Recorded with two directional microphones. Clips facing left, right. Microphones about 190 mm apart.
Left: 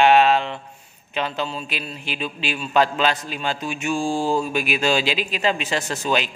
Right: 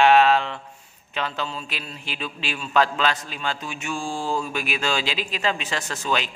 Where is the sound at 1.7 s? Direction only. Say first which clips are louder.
Left 4 dB; 65° left (ahead or behind).